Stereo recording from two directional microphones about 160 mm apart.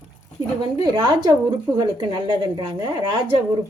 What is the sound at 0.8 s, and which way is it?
A woman's voice, 25° right (ahead or behind).